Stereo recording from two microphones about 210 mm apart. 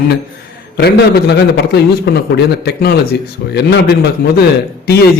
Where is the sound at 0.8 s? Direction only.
50° left (ahead or behind).